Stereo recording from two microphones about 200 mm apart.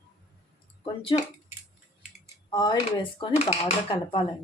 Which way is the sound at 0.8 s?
25° left (ahead or behind).